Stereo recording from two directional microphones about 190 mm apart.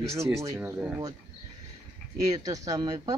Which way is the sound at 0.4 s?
15° right (ahead or behind).